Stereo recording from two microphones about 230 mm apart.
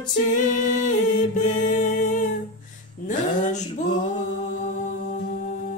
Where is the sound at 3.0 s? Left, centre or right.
Left.